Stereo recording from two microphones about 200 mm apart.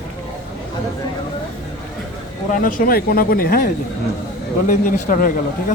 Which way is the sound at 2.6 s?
45° left (ahead or behind).